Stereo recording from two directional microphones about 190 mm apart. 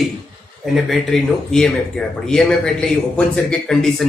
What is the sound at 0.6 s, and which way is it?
A man's voice, centre (ahead or behind).